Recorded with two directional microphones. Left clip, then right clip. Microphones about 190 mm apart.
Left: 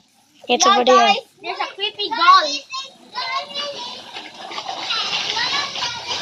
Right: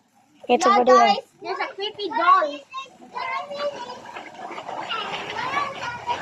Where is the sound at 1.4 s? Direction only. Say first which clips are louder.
Left 3 dB; 35° left (ahead or behind).